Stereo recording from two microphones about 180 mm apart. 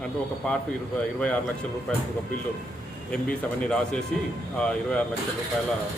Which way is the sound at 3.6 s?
5° left (ahead or behind).